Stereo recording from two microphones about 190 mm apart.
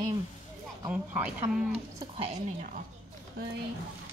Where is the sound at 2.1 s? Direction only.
35° right (ahead or behind).